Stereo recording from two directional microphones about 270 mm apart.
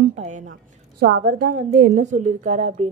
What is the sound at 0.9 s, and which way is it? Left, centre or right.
A woman's voice, right.